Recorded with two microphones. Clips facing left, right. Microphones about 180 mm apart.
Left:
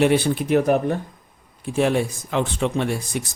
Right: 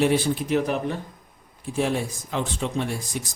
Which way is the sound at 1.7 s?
70° left (ahead or behind).